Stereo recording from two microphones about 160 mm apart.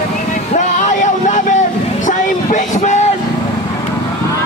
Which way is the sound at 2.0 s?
50° left (ahead or behind).